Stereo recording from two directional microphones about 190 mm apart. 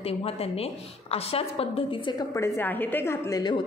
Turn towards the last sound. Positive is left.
turn(degrees=20)  # may be behind; listen again after turning